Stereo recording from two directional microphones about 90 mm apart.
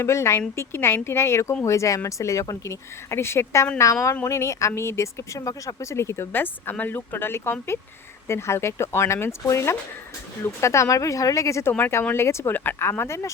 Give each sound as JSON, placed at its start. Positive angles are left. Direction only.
{"t": 0.0, "sound": "speech", "side_deg": 30}